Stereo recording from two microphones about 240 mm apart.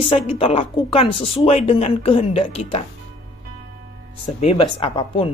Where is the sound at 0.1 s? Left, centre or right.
Left.